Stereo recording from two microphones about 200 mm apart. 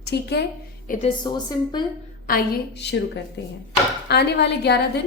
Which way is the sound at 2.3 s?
50° left (ahead or behind).